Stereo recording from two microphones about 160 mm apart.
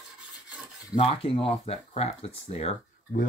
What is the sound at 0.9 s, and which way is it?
Speech, 35° left (ahead or behind).